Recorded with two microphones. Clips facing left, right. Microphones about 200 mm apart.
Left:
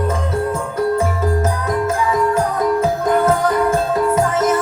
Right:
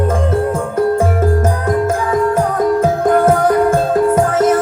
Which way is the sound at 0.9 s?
50° right (ahead or behind).